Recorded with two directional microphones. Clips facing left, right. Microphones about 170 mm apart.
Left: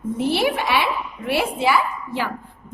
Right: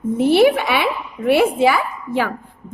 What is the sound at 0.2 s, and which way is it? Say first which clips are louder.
A woman's voice: right 8 dB; 55° right (ahead or behind).